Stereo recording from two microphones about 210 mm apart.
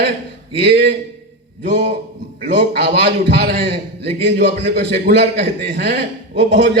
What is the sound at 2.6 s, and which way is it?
A man's voice, 50° right (ahead or behind).